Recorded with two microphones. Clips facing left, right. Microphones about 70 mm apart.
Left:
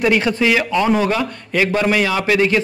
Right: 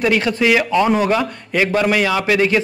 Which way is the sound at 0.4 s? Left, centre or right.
Centre.